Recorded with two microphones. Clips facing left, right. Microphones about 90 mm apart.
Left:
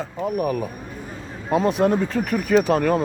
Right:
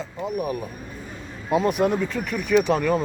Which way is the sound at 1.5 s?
35° left (ahead or behind).